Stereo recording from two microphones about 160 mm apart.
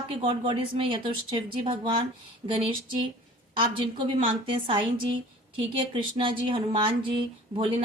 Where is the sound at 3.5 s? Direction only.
30° right (ahead or behind).